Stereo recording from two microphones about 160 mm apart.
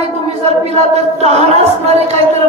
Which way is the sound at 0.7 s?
40° right (ahead or behind).